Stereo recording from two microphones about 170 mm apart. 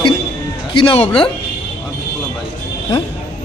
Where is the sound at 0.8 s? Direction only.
35° left (ahead or behind).